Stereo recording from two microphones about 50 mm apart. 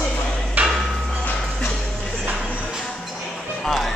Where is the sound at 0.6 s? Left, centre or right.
Right.